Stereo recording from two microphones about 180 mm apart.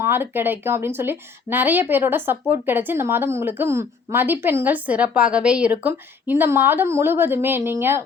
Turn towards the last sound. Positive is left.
turn(degrees=-10)  # may be behind; listen again after turning